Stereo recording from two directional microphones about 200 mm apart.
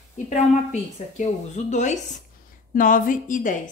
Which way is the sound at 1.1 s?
35° left (ahead or behind).